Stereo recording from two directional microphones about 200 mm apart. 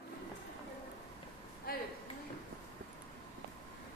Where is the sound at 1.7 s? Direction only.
50° left (ahead or behind).